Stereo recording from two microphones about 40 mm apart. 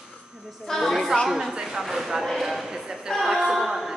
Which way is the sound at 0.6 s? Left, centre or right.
Centre.